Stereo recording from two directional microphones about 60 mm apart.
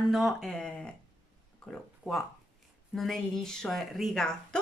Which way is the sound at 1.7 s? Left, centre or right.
Centre.